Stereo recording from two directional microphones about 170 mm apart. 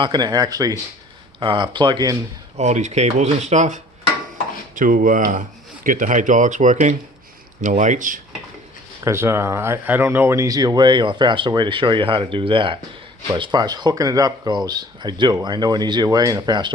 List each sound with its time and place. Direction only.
0.0 s speech: 25° right (ahead or behind)
2.6 s speech: 40° right (ahead or behind)
4.7 s speech: 50° right (ahead or behind)
9.0 s speech: 15° right (ahead or behind)